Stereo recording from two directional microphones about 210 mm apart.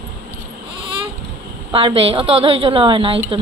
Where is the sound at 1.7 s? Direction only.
25° right (ahead or behind).